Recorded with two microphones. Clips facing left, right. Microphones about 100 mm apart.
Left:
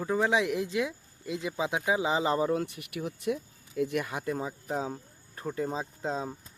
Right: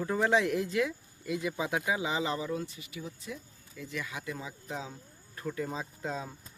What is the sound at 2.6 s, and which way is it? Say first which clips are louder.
Speech: left 6 dB; 65° left (ahead or behind).